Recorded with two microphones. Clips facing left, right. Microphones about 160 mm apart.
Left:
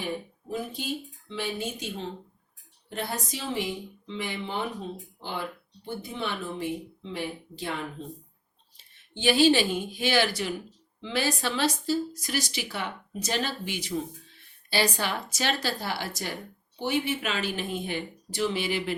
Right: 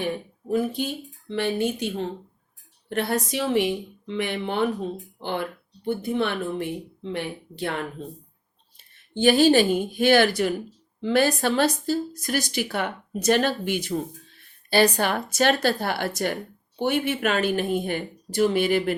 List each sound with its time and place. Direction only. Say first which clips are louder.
0.5 s a woman's voice: right 7 dB; 60° right (ahead or behind)
5.8 s speech: right 9 dB; 60° right (ahead or behind)
9.1 s a woman's voice: right 4 dB; 45° right (ahead or behind)